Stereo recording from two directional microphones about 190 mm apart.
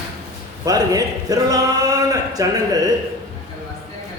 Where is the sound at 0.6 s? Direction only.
20° right (ahead or behind).